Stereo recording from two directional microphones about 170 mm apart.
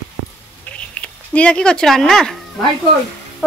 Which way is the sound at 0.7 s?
5° left (ahead or behind).